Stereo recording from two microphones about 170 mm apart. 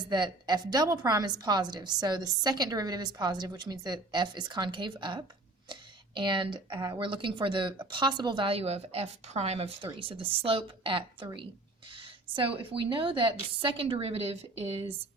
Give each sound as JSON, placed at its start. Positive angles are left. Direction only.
{"t": 0.0, "sound": "a woman's voice", "side_deg": -25}